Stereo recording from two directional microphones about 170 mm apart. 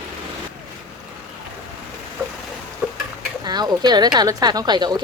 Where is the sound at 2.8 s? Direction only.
5° right (ahead or behind).